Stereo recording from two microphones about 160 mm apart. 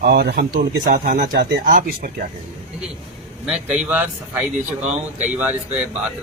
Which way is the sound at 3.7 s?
10° right (ahead or behind).